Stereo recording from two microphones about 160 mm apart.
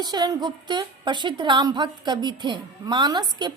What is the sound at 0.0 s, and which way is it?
A woman's voice, 25° right (ahead or behind).